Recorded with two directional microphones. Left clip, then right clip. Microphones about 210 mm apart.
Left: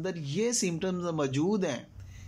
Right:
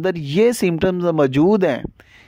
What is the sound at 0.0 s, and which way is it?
Speech, 45° right (ahead or behind).